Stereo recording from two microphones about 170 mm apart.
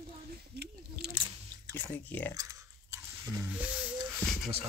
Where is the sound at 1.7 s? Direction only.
10° left (ahead or behind).